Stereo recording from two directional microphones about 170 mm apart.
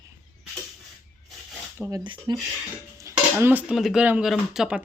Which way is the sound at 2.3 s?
25° right (ahead or behind).